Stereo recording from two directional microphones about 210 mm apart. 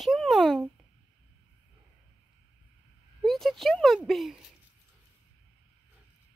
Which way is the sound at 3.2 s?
Centre (ahead or behind).